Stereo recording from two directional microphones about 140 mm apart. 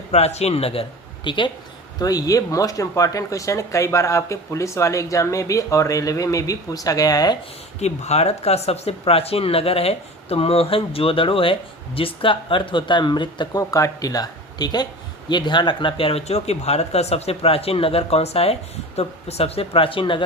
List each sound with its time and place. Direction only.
0.1 s speech: 50° left (ahead or behind); by 7.3 s 25° left (ahead or behind)
7.8 s speech: 50° left (ahead or behind)